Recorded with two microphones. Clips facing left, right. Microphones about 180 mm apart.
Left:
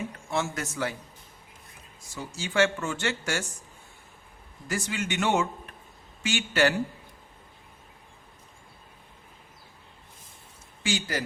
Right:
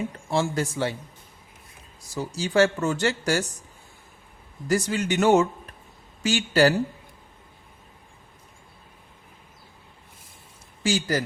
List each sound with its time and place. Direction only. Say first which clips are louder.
0.3 s speech: right 6 dB; 30° right (ahead or behind)
2.0 s speech: right 7 dB; 35° right (ahead or behind)
4.7 s speech: right 7 dB; 40° right (ahead or behind)
10.8 s speech: right 6 dB; 40° right (ahead or behind)